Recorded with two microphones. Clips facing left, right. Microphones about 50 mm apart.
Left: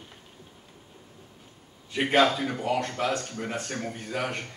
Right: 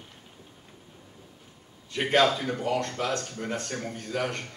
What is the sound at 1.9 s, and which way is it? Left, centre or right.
A man's voice, centre.